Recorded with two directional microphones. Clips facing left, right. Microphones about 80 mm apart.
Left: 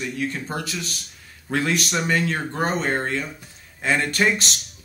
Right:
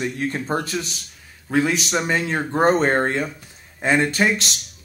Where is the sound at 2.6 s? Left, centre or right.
Right.